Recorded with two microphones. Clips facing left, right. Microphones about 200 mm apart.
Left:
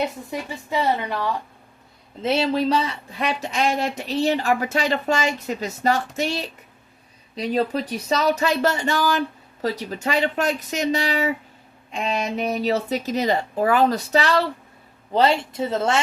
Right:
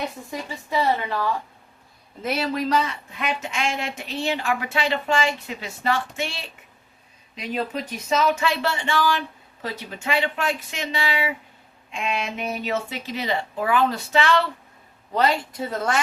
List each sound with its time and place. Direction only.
0.3 s a woman's voice: 20° left (ahead or behind); by 14.4 s 40° left (ahead or behind)
15.1 s a woman's voice: 30° left (ahead or behind)